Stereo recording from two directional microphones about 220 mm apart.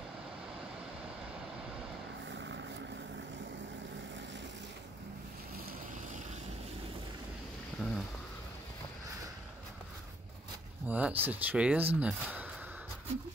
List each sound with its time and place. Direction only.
2.2 s vehicle: 55° right (ahead or behind)
7.8 s a sound: centre (ahead or behind)
10.9 s speech: 5° right (ahead or behind)